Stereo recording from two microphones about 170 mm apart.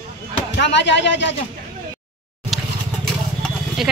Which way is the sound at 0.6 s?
90° left.